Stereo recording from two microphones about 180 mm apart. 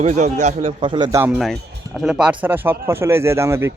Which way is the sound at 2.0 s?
5° right (ahead or behind).